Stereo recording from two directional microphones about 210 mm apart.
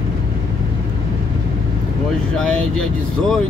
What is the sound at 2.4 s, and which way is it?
Speech, 5° left (ahead or behind).